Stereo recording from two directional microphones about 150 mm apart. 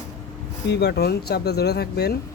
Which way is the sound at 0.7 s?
90° left.